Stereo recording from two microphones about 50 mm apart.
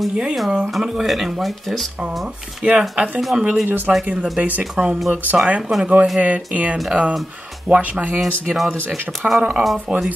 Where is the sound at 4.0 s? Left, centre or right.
Right.